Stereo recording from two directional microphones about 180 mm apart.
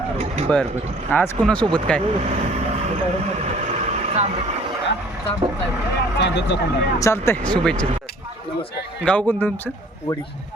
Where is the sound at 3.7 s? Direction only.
35° right (ahead or behind).